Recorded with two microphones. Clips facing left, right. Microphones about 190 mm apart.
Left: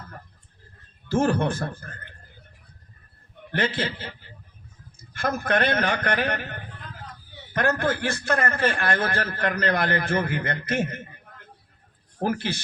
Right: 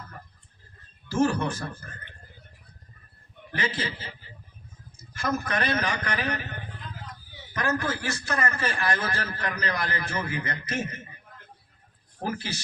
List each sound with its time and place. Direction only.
1.0 s a man's voice: 55° left (ahead or behind)
3.5 s a man's voice: 55° left (ahead or behind)
12.2 s a man's voice: 60° left (ahead or behind)